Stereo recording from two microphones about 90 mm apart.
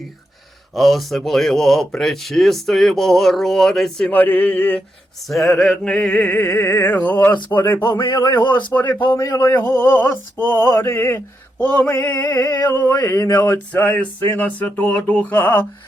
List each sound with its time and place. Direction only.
0.7 s speech: centre (ahead or behind)
4.1 s music: 15° left (ahead or behind)
5.3 s speech: centre (ahead or behind)
5.6 s music: 10° left (ahead or behind)
6.4 s a sound: 25° left (ahead or behind)
7.9 s a man's voice: 65° left (ahead or behind)
8.9 s a sound: 20° left (ahead or behind)
9.1 s a man's voice: 40° left (ahead or behind)
9.4 s a sound: 25° left (ahead or behind)